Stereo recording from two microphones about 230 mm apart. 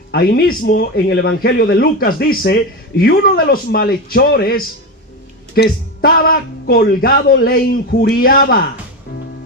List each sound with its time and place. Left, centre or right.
0.1 s speech: left